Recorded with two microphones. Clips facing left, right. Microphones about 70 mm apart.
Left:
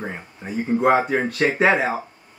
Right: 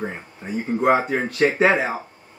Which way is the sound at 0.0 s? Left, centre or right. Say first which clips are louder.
Right 1 dB; centre.